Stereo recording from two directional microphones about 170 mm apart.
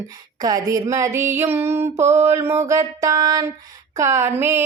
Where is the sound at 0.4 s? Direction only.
20° right (ahead or behind).